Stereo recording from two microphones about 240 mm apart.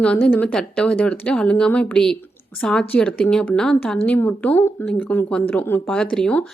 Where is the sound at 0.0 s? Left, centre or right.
Centre.